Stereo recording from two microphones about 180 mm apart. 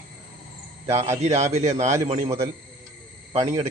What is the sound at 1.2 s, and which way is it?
Speech, 35° right (ahead or behind).